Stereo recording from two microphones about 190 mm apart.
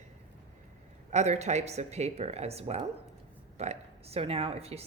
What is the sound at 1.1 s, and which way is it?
Speech, 35° right (ahead or behind).